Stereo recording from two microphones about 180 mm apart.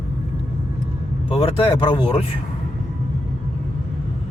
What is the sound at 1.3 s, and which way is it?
Speech, 30° left (ahead or behind).